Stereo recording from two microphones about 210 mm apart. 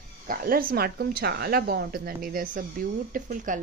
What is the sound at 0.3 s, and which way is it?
A woman's voice, 45° right (ahead or behind).